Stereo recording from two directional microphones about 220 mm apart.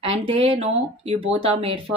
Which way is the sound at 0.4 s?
25° right (ahead or behind).